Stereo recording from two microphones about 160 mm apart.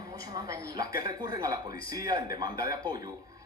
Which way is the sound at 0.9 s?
25° right (ahead or behind).